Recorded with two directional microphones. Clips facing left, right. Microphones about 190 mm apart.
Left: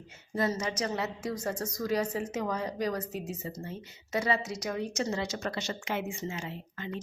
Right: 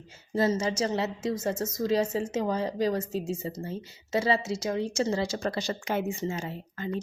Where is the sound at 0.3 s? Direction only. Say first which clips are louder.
Right 5 dB; 25° right (ahead or behind).